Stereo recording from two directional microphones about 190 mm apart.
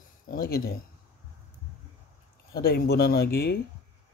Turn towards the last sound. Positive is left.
turn(degrees=55)  # may be behind; listen again after turning